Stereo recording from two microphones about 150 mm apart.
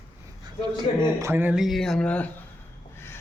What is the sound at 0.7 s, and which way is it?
Speech, 20° right (ahead or behind).